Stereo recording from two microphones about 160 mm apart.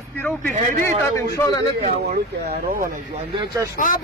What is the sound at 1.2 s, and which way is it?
Speech, 20° left (ahead or behind).